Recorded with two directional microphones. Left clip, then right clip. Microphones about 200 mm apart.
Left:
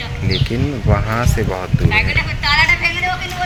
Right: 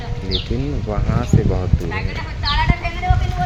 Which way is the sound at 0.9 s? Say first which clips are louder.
Left 6 dB; 10° left (ahead or behind).